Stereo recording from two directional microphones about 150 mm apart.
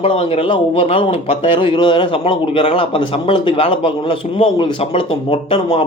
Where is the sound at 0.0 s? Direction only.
35° left (ahead or behind).